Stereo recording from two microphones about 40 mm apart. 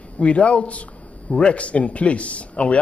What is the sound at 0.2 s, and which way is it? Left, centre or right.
Speech, left.